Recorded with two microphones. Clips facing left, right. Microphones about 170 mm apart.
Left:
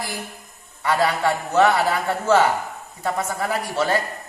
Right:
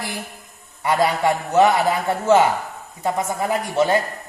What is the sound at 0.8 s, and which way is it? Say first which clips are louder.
A man's voice: right 2 dB; 15° right (ahead or behind).